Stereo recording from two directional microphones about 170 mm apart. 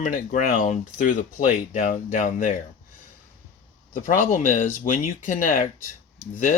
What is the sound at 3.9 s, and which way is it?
Speech, 55° left (ahead or behind).